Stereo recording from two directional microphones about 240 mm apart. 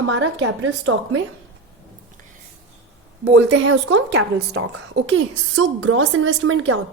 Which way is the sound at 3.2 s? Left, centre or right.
Right.